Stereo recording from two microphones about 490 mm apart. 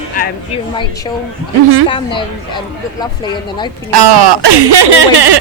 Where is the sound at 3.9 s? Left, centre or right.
Right.